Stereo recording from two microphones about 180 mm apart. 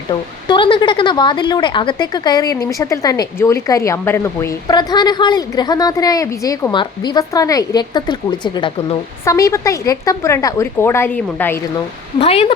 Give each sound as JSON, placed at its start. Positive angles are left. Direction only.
{"t": 0.1, "sound": "a woman's voice", "side_deg": 25}
{"t": 12.2, "sound": "speech", "side_deg": 35}